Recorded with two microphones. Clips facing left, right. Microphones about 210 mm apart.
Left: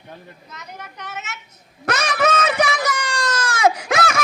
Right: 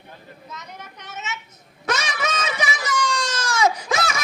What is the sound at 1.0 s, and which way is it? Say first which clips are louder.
Speech: right 1 dB; 60° left (ahead or behind).